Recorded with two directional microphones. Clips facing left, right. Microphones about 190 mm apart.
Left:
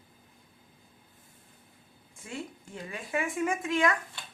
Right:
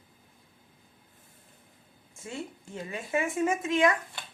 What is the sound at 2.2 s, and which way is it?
A woman's voice, 25° right (ahead or behind).